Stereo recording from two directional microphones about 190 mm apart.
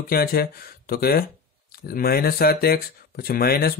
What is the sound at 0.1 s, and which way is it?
Speech, 50° left (ahead or behind).